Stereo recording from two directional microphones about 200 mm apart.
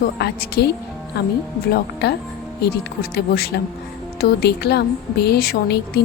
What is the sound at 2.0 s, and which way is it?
Speech, 55° left (ahead or behind).